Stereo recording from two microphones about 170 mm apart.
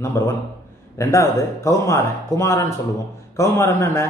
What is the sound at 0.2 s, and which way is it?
A man's voice, 15° left (ahead or behind).